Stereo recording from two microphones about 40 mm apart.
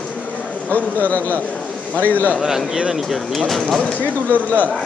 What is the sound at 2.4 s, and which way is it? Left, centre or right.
Speech, centre.